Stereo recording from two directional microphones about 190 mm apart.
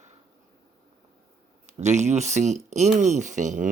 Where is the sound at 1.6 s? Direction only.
35° right (ahead or behind).